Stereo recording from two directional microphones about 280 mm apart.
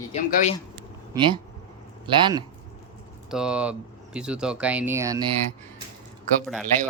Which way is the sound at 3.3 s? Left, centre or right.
Centre.